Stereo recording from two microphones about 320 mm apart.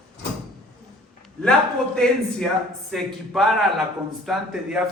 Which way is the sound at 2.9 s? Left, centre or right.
Centre.